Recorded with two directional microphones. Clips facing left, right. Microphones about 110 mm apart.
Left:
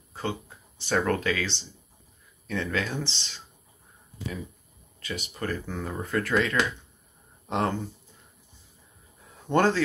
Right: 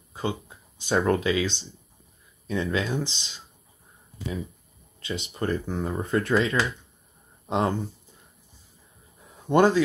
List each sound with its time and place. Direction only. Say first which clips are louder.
0.1 s speech: right 2 dB; 15° right (ahead or behind)
5.0 s speech: right 4 dB; 25° right (ahead or behind)
9.5 s speech: right 3 dB; 15° right (ahead or behind)